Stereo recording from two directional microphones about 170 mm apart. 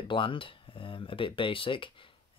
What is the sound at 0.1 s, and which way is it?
Speech, 30° left (ahead or behind).